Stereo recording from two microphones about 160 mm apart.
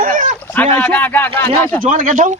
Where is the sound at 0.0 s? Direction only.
60° right (ahead or behind).